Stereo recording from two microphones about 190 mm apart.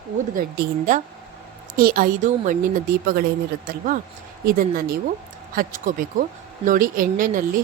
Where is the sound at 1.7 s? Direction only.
50° right (ahead or behind).